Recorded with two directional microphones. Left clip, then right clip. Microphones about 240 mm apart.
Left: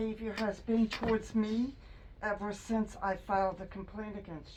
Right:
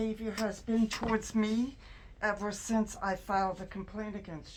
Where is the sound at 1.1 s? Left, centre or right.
Right.